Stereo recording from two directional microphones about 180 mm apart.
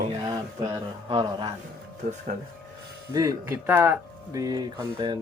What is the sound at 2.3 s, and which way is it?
Speech, 50° right (ahead or behind).